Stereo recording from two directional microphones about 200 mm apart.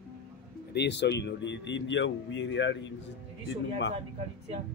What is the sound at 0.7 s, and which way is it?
Speech, 60° left (ahead or behind).